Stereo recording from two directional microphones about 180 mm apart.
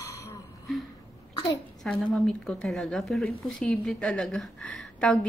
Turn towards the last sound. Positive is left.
turn(degrees=5)  # may be behind; listen again after turning